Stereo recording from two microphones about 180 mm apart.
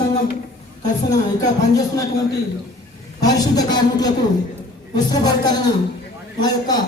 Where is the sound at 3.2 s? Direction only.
20° left (ahead or behind).